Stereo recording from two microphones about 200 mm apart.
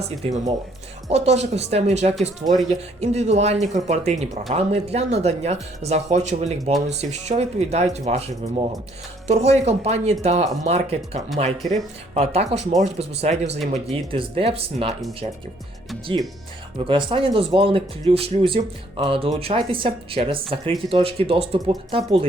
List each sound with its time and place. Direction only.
1.1 s speech: 35° right (ahead or behind)
16.7 s speech: 25° right (ahead or behind)